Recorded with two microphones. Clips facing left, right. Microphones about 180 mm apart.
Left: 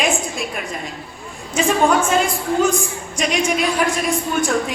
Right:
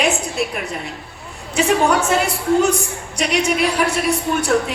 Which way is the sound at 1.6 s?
70° right (ahead or behind).